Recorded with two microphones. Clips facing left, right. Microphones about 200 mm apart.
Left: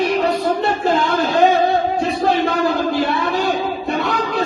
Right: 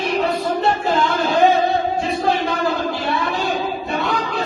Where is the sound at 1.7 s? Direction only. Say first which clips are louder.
Left 2 dB; 55° left (ahead or behind).